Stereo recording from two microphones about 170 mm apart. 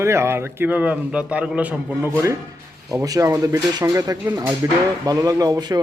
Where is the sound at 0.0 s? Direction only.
15° right (ahead or behind).